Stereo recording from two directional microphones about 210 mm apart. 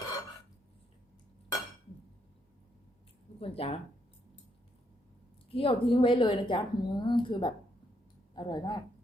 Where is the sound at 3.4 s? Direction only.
30° left (ahead or behind).